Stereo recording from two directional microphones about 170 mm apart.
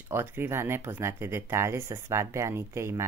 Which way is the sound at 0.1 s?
15° right (ahead or behind).